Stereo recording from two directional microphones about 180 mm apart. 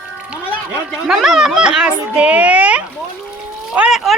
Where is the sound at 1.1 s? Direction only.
5° right (ahead or behind).